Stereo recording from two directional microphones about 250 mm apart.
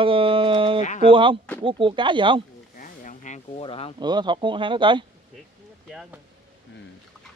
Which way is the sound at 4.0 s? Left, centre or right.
Centre.